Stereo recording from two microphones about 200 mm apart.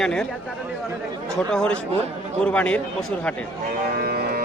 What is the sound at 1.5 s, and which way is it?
Speech, 5° left (ahead or behind).